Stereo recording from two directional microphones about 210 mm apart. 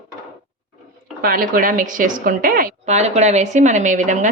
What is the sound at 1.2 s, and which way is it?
A woman's voice, 40° right (ahead or behind).